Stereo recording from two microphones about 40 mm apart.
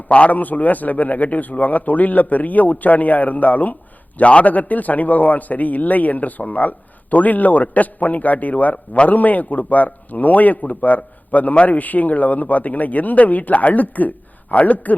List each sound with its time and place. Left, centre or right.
0.1 s a man's voice: left